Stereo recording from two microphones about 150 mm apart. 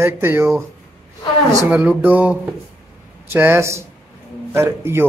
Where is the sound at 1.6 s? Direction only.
10° right (ahead or behind).